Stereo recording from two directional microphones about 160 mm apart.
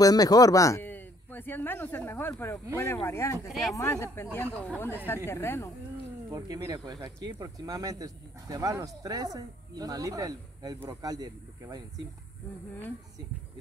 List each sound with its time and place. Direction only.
0.0 s speech: 25° left (ahead or behind)
3.4 s speech: centre (ahead or behind)
3.7 s speech: 15° left (ahead or behind)
6.3 s speech: 20° right (ahead or behind)